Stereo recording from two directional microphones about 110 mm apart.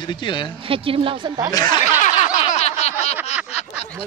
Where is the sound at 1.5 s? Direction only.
40° left (ahead or behind).